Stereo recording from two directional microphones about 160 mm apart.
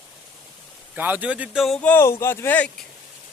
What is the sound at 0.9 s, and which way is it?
Speech, 10° right (ahead or behind).